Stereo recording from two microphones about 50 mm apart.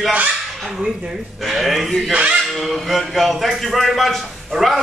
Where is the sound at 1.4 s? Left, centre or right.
Centre.